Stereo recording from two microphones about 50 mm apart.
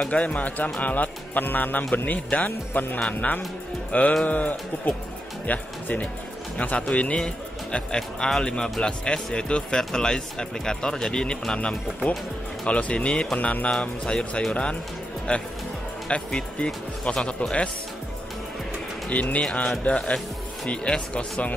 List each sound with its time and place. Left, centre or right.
0.1 s speech: left
19.0 s speech: left